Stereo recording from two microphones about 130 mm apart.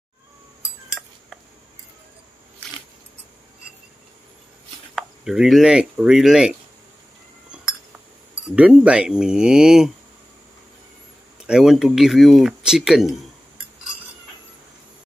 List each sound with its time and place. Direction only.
1.0 s a sound: 5° left (ahead or behind)
4.9 s speech: 5° right (ahead or behind)
8.5 s speech: 10° right (ahead or behind)
11.3 s speech: 5° right (ahead or behind)